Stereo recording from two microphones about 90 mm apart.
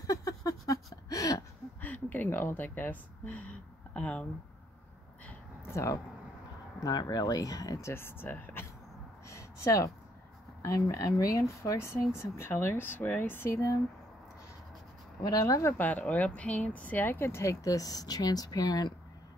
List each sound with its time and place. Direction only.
0.0 s a sound: 40° left (ahead or behind)
1.8 s a sound: 20° left (ahead or behind)
5.7 s speech: 30° left (ahead or behind)
6.8 s speech: 50° left (ahead or behind)
7.9 s speech: 25° left (ahead or behind)
9.3 s a sound: 35° left (ahead or behind)
10.6 s speech: 40° left (ahead or behind)
15.2 s speech: 40° left (ahead or behind)
15.8 s speech: 20° left (ahead or behind); by 18.9 s 45° left (ahead or behind)